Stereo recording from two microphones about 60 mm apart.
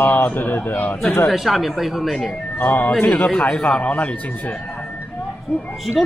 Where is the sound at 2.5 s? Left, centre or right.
Left.